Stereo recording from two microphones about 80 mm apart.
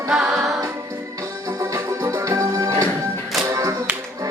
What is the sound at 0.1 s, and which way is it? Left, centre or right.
Music, centre.